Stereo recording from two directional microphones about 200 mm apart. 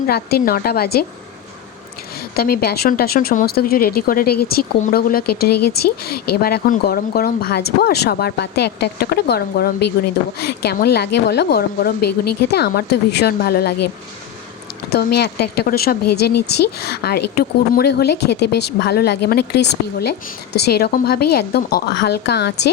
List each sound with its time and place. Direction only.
0.1 s speech: 50° left (ahead or behind)
2.3 s a woman's voice: 50° left (ahead or behind)
14.8 s speech: 55° left (ahead or behind)